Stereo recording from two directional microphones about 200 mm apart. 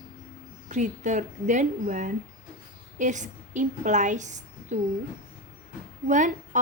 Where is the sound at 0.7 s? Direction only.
40° right (ahead or behind).